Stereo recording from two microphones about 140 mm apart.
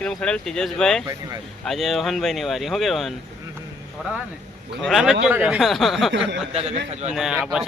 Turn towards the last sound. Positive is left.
turn(degrees=-5)  # may be behind; listen again after turning